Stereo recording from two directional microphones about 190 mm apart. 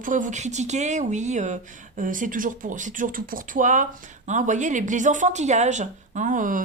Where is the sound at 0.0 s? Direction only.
45° right (ahead or behind).